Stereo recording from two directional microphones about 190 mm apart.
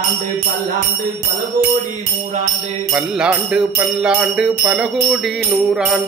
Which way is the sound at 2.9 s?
5° right (ahead or behind).